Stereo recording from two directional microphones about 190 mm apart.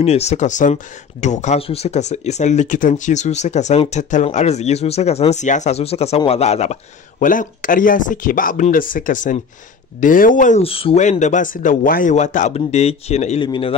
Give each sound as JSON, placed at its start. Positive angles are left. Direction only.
{"t": 0.0, "sound": "a man's voice", "side_deg": 35}